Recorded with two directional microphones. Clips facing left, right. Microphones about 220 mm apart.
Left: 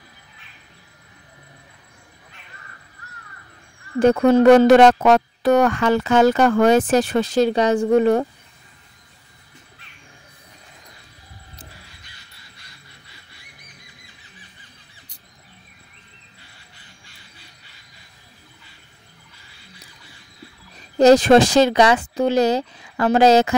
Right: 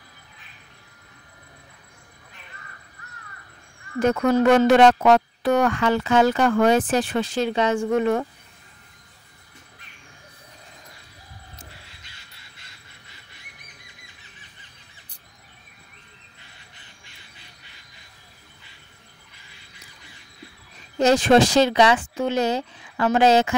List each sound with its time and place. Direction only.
4.0 s speech: 30° left (ahead or behind)
21.0 s speech: 40° left (ahead or behind)